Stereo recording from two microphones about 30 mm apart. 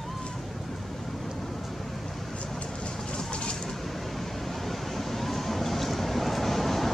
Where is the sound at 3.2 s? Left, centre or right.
Left.